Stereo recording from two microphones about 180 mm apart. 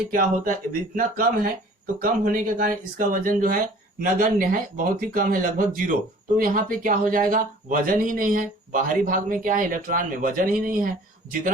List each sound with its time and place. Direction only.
0.1 s speech: 50° right (ahead or behind)